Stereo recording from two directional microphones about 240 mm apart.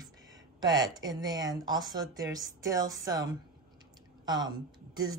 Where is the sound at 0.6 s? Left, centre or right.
Centre.